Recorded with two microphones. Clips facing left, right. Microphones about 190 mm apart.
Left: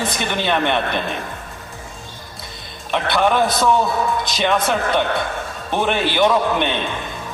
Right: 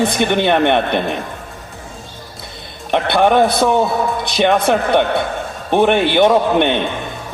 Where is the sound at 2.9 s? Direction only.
55° right (ahead or behind).